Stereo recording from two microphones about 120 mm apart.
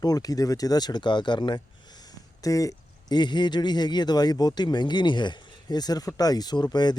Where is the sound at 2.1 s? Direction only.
30° left (ahead or behind).